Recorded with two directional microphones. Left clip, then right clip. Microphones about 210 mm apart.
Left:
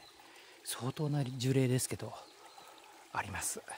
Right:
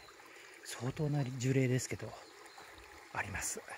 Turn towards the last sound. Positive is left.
turn(degrees=10)  # may be behind; listen again after turning